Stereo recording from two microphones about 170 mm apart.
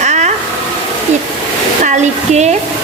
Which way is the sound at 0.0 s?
45° right (ahead or behind).